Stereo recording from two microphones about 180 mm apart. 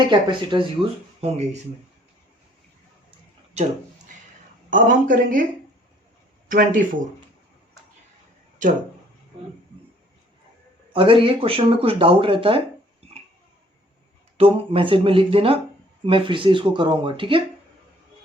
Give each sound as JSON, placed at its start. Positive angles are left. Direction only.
{"t": 0.1, "sound": "speech", "side_deg": -25}
{"t": 3.6, "sound": "speech", "side_deg": -40}
{"t": 4.7, "sound": "speech", "side_deg": -50}
{"t": 6.5, "sound": "speech", "side_deg": -50}
{"t": 10.9, "sound": "speech", "side_deg": -30}
{"t": 14.3, "sound": "speech", "side_deg": -30}